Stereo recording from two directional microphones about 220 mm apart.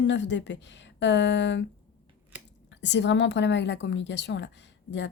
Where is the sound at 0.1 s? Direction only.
55° left (ahead or behind).